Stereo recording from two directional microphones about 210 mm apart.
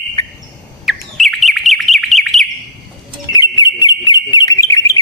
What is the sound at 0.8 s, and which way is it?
Bird, centre (ahead or behind).